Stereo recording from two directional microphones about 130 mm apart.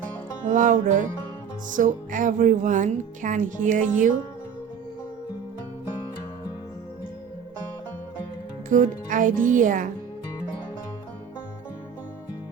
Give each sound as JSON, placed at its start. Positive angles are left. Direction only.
{"t": 0.4, "sound": "speech", "side_deg": -80}
{"t": 8.7, "sound": "speech", "side_deg": -85}